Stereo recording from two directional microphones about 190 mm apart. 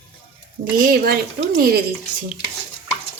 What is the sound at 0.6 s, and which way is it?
A woman's voice, 50° right (ahead or behind).